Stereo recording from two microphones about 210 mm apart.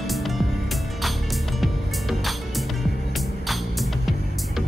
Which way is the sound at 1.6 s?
Centre (ahead or behind).